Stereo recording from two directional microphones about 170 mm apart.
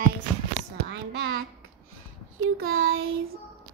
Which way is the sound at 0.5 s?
90° right.